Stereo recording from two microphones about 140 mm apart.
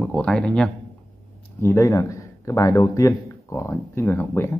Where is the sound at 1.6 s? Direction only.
20° left (ahead or behind).